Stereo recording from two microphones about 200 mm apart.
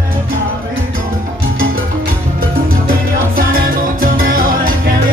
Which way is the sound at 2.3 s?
45° right (ahead or behind).